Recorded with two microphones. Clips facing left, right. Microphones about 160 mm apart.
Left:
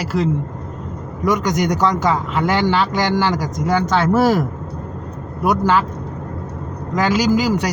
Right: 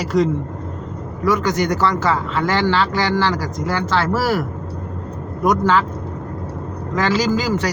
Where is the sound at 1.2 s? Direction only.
15° left (ahead or behind).